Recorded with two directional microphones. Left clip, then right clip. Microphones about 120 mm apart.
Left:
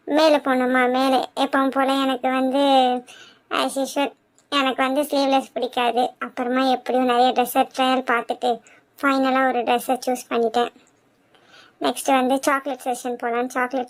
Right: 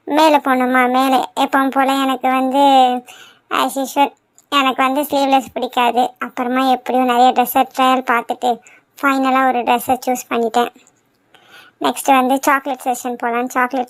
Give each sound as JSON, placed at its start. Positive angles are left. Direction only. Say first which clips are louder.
{"t": 0.1, "sound": "a woman's voice", "louder": "right 5 dB", "side_deg": -30}